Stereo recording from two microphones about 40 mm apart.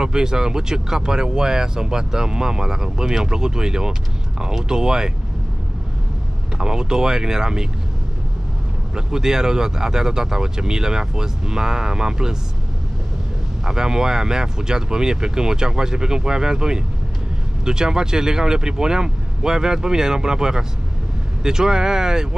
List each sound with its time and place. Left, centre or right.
0.0 s speech: centre
6.6 s speech: centre
8.9 s speech: centre
13.7 s speech: centre